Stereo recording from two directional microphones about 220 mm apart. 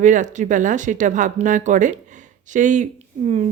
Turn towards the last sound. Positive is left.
turn(degrees=-30)  # may be behind; listen again after turning